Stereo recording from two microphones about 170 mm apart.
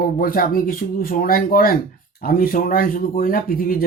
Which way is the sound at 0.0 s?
60° left (ahead or behind).